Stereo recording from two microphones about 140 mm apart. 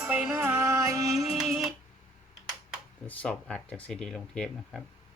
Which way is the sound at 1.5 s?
Centre (ahead or behind).